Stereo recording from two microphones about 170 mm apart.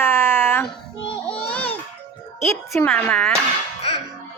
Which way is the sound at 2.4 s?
15° left (ahead or behind).